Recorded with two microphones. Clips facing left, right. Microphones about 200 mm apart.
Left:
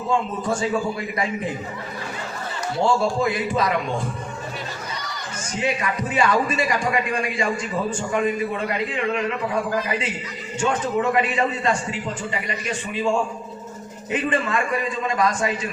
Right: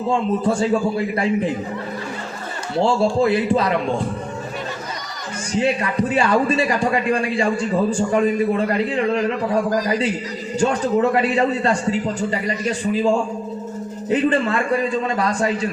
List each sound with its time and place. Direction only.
0.1 s a man's voice: 30° right (ahead or behind)
2.8 s a man's voice: 30° right (ahead or behind)
5.5 s a man's voice: 35° right (ahead or behind)